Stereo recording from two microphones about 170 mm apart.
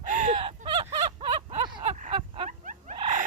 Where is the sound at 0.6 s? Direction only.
30° right (ahead or behind).